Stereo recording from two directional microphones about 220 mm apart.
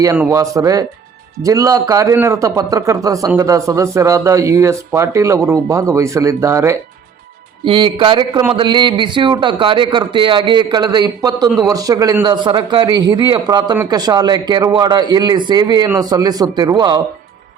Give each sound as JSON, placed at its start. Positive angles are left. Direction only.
{"t": 0.0, "sound": "a man's voice", "side_deg": -15}
{"t": 11.4, "sound": "a man's voice", "side_deg": 0}
{"t": 11.7, "sound": "a man's voice", "side_deg": -15}